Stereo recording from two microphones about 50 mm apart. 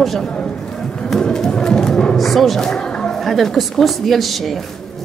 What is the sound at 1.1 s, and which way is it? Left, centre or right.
Speech, centre.